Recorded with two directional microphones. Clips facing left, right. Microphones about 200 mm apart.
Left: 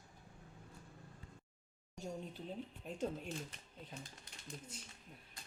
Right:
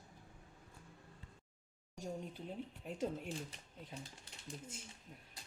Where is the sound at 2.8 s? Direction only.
15° right (ahead or behind).